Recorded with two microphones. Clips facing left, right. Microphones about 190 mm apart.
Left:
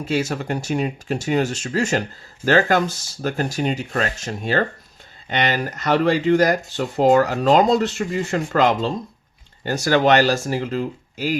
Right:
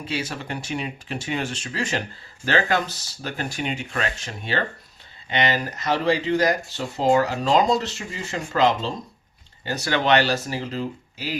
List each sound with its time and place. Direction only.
0.0 s speech: 45° left (ahead or behind)